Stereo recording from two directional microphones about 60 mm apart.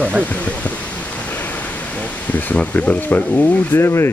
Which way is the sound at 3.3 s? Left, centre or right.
Left.